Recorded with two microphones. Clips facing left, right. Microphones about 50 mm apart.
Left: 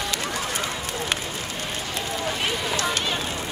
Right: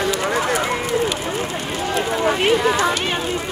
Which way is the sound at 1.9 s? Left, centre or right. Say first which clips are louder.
Right 10 dB; right.